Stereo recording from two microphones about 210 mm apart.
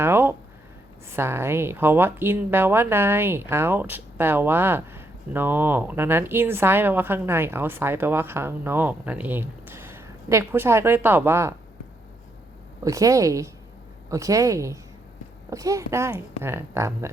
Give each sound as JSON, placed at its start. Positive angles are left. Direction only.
{"t": 0.0, "sound": "a sound", "side_deg": -10}
{"t": 1.1, "sound": "speech", "side_deg": -10}
{"t": 12.8, "sound": "speech", "side_deg": -15}